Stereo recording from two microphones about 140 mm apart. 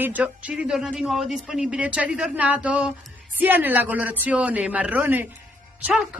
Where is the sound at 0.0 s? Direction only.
10° right (ahead or behind).